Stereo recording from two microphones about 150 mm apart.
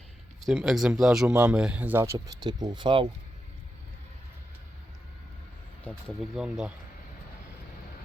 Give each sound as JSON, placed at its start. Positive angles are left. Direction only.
{"t": 0.4, "sound": "speech", "side_deg": 0}
{"t": 2.1, "sound": "speech", "side_deg": -30}
{"t": 5.8, "sound": "speech", "side_deg": 5}
{"t": 6.3, "sound": "speech", "side_deg": -5}